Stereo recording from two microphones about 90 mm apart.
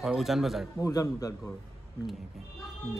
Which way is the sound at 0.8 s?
40° left (ahead or behind).